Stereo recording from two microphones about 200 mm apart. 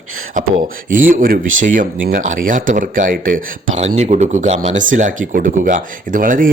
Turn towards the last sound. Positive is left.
turn(degrees=-45)  # may be behind; listen again after turning